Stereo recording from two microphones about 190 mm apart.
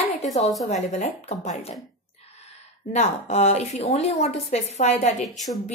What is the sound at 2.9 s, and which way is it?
Speech, 35° left (ahead or behind).